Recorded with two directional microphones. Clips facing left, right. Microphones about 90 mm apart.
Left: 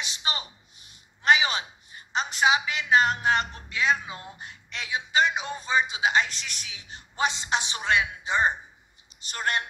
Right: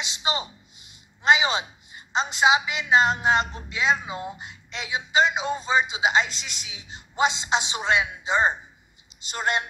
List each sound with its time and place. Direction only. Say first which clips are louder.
0.0 s a woman's voice: right 5 dB; 25° right (ahead or behind)